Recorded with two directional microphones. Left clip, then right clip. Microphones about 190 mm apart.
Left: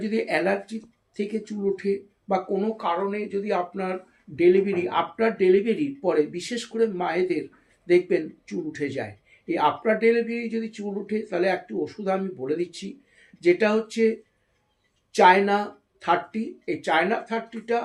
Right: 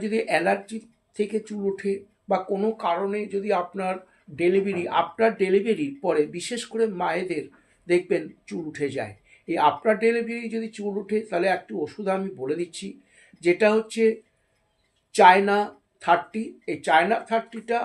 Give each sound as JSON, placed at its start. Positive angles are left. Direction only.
{"t": 0.0, "sound": "speech", "side_deg": -30}